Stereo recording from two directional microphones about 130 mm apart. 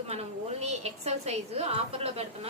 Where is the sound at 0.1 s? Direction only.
55° right (ahead or behind).